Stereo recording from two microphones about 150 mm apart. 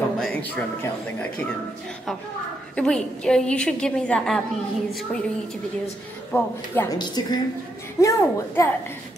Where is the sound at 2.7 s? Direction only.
5° left (ahead or behind).